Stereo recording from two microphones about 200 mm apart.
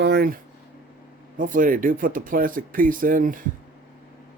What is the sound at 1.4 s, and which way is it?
Speech, 40° right (ahead or behind).